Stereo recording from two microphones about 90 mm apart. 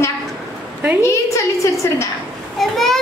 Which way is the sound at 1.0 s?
35° left (ahead or behind).